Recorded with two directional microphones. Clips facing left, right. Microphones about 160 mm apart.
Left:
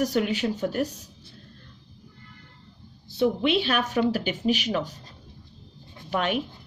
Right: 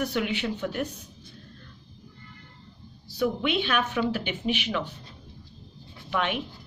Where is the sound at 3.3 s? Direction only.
35° left (ahead or behind).